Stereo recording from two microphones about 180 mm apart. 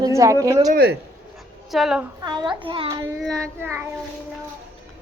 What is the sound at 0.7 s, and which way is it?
Speech, 60° right (ahead or behind).